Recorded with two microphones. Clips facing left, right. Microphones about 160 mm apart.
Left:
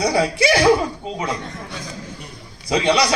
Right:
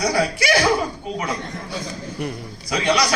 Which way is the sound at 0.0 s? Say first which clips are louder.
Left 3 dB; 25° left (ahead or behind).